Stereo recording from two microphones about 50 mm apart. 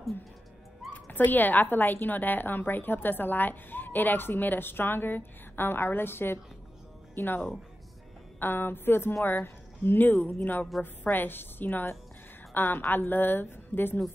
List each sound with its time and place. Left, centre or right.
0.9 s a woman's voice: left